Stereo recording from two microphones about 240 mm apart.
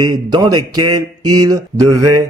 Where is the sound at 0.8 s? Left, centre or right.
Right.